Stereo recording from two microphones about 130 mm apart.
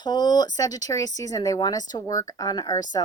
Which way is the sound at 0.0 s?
35° left (ahead or behind).